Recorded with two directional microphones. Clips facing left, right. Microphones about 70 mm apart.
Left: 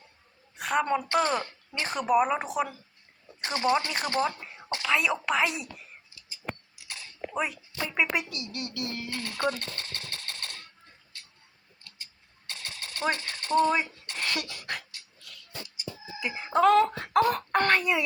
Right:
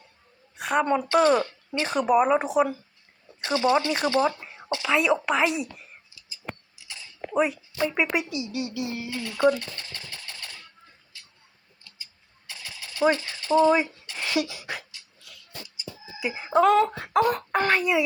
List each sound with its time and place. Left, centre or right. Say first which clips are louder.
0.5 s a woman's voice: right 3 dB; centre
1.1 s speech: right 7 dB; right
1.9 s speech: right 4 dB; centre
3.4 s speech: right 4 dB; left
4.0 s speech: right 5 dB; centre
6.7 s scissors: even; left
7.3 s speech: right 8 dB; centre
9.0 s speech: right 3 dB; left
9.5 s typewriter: right 7 dB; left
11.1 s tick: even; left
12.5 s a sound: even; left
13.1 s speech: right 3 dB; left
14.2 s a sound: right 6 dB; centre
16.4 s speech: right 2 dB; centre